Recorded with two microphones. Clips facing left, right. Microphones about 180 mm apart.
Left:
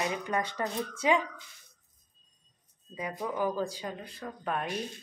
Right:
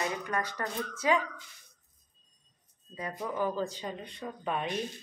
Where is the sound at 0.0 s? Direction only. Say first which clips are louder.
Left 2 dB; 20° left (ahead or behind).